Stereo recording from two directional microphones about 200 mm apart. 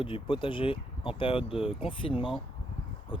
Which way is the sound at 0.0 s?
25° left (ahead or behind).